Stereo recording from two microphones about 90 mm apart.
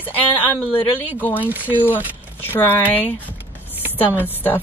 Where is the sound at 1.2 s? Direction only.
20° left (ahead or behind).